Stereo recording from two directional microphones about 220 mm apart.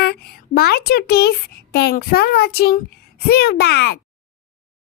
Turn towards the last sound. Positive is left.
turn(degrees=50)  # may be behind; listen again after turning